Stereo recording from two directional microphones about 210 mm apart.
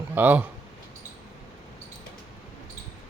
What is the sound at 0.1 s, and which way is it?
Speech, 10° right (ahead or behind).